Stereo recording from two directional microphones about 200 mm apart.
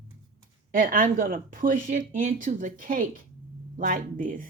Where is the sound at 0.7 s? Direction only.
45° right (ahead or behind).